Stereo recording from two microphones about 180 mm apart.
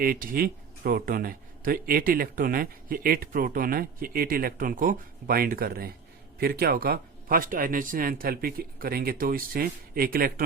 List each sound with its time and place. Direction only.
0.0 s speech: 50° right (ahead or behind)